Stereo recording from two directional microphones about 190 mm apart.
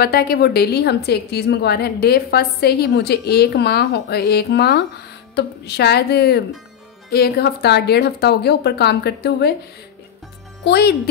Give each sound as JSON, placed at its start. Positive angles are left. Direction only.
{"t": 0.0, "sound": "a woman's voice", "side_deg": 55}
{"t": 10.6, "sound": "speech", "side_deg": 55}